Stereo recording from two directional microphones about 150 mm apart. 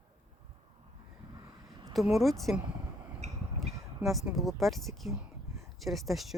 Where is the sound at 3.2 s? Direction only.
50° right (ahead or behind).